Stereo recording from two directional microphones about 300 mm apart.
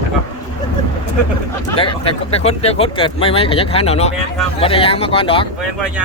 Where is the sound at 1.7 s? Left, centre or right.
Centre.